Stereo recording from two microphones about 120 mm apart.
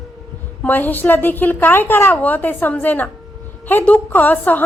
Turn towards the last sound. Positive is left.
turn(degrees=15)  # may be behind; listen again after turning